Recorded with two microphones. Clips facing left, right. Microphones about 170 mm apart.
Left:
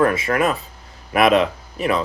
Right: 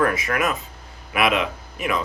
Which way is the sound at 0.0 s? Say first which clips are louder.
Left 4 dB; 25° left (ahead or behind).